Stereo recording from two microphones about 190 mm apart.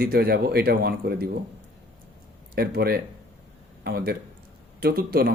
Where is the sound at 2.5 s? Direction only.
55° right (ahead or behind).